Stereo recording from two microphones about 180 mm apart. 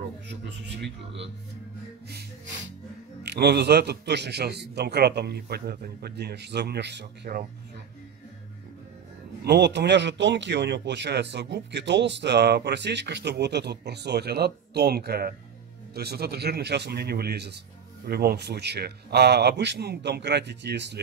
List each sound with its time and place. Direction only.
0.3 s speech: 75° right (ahead or behind)
3.3 s a man's voice: 65° right (ahead or behind)
9.4 s a man's voice: 70° right (ahead or behind)